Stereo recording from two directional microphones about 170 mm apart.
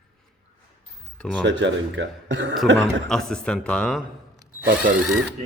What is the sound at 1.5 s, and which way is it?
Speech, 90° right.